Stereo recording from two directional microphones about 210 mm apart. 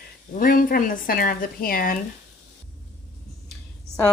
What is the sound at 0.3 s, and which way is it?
Speech, 40° left (ahead or behind).